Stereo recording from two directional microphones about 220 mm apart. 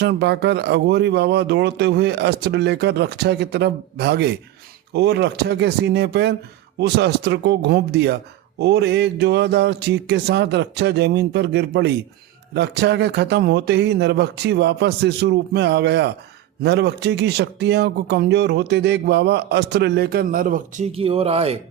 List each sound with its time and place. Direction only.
0.0 s speech: 50° right (ahead or behind); by 21.6 s 25° right (ahead or behind)